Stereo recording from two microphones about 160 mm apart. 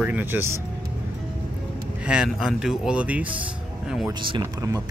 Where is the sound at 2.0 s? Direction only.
5° right (ahead or behind).